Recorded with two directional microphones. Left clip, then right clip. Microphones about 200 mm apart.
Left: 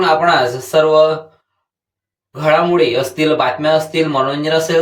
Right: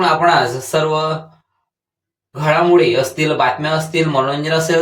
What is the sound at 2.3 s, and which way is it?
Speech, 5° left (ahead or behind).